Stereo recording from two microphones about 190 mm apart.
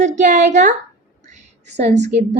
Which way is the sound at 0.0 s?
40° right (ahead or behind).